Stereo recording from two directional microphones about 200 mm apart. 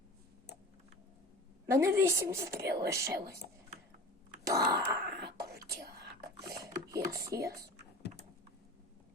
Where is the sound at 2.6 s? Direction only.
55° right (ahead or behind).